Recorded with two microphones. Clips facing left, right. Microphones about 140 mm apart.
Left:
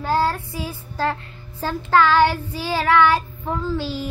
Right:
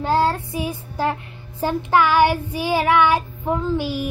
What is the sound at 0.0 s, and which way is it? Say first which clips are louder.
Child singing: right 2 dB; 20° right (ahead or behind).